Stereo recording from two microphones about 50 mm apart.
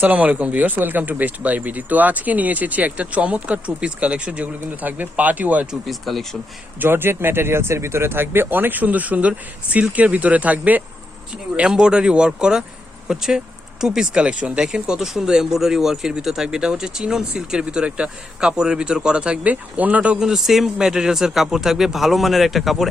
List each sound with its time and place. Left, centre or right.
0.0 s speech: right
4.8 s speech: right
5.8 s a man's voice: centre
6.7 s speech: right
11.5 s speech: centre
14.7 s speech: centre; by 20.1 s right
20.1 s a man's voice: centre